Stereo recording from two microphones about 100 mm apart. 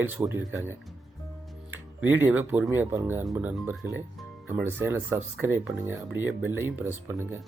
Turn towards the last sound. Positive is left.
turn(degrees=-25)  # may be behind; listen again after turning